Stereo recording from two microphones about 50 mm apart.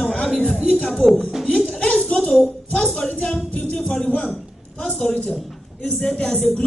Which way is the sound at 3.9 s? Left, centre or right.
Centre.